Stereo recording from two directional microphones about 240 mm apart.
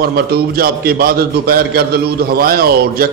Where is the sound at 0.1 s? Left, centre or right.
Right.